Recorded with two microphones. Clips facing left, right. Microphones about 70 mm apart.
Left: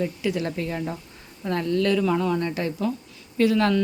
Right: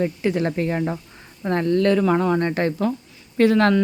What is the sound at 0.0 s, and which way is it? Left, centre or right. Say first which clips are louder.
Speech: right 4 dB; right.